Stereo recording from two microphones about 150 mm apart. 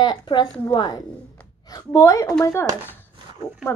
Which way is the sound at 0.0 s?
30° left (ahead or behind).